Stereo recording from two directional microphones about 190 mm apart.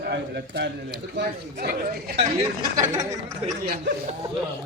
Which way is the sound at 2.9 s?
20° right (ahead or behind).